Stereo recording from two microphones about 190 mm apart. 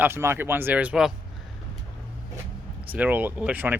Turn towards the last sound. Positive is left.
turn(degrees=-10)  # may be behind; listen again after turning